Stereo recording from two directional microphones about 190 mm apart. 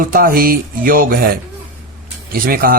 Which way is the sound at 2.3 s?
50° right (ahead or behind).